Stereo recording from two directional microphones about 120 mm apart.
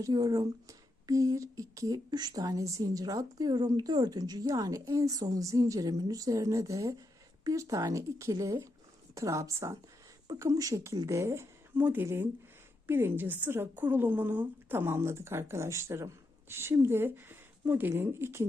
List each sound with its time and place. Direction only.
0.0 s speech: 30° right (ahead or behind)